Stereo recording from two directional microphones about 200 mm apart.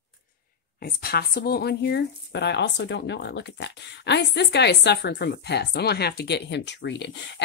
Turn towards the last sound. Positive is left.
turn(degrees=60)  # may be behind; listen again after turning